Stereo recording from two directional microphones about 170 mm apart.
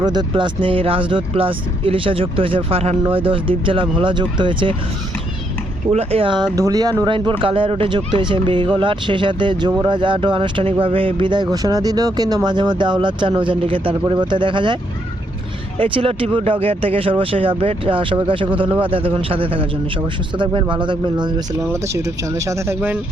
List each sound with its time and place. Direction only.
0.0 s speech: 25° right (ahead or behind)
5.9 s speech: 35° right (ahead or behind)
15.8 s speech: 35° right (ahead or behind); by 23.0 s 10° right (ahead or behind)